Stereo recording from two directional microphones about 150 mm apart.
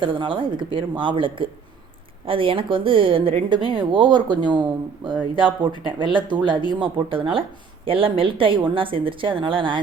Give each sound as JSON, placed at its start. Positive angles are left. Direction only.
{"t": 0.0, "sound": "speech", "side_deg": -35}